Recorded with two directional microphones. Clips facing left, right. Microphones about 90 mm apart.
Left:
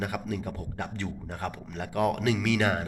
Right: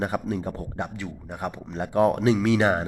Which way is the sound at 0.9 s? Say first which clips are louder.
Even; 5° right (ahead or behind).